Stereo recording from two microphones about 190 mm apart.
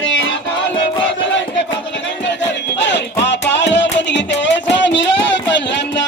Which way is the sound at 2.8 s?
70° left (ahead or behind).